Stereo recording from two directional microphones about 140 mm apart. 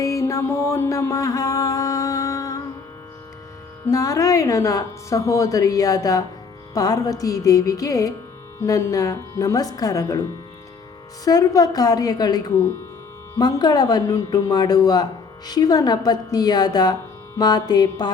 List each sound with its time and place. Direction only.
0.0 s mantra: 20° left (ahead or behind)
3.8 s speech: 25° left (ahead or behind)
11.3 s speech: 25° left (ahead or behind)